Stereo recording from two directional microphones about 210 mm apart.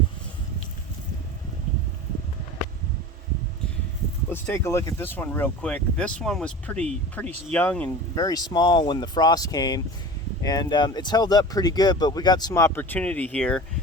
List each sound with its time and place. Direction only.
4.3 s speech: 10° left (ahead or behind)